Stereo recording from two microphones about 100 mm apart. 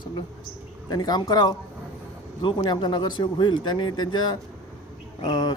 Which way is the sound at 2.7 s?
45° left (ahead or behind).